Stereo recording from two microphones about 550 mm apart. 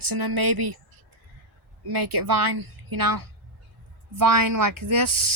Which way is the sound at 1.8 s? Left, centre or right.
Right.